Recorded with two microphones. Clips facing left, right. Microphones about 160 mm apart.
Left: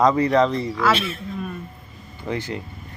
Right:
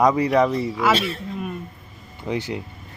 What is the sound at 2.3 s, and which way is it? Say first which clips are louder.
Speech: right 1 dB; 15° right (ahead or behind).